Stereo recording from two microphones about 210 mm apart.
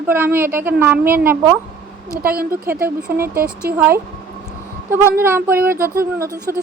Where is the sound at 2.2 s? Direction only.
45° right (ahead or behind).